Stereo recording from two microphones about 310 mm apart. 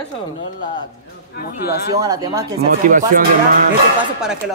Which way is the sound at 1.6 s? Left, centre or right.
Left.